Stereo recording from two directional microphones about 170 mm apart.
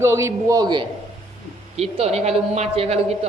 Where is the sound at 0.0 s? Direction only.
15° right (ahead or behind).